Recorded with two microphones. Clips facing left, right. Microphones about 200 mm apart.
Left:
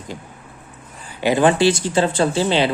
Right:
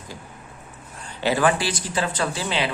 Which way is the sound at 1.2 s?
20° left (ahead or behind).